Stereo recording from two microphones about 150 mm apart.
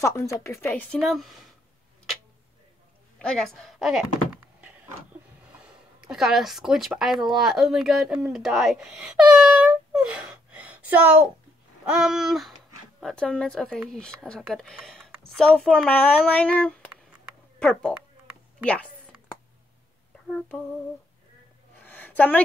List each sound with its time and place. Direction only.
0.0 s a woman's voice: 20° left (ahead or behind)
0.7 s speech: centre (ahead or behind)
3.2 s a woman's voice: 5° left (ahead or behind)
21.7 s a sound: 10° left (ahead or behind)